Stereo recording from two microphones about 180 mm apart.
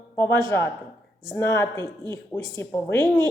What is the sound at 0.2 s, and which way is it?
Speech, 15° left (ahead or behind).